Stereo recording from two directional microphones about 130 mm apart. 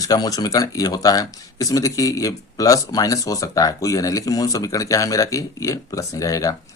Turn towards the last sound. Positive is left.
turn(degrees=25)  # may be behind; listen again after turning